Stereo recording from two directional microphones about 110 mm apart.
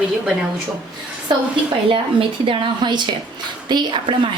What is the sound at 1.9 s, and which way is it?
A woman's voice, 55° right (ahead or behind).